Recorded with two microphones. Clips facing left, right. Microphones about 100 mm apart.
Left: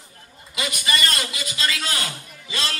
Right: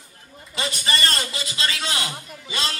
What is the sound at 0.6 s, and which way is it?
A man's voice, 30° right (ahead or behind).